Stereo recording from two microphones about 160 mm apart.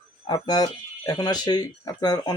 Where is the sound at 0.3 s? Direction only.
25° left (ahead or behind).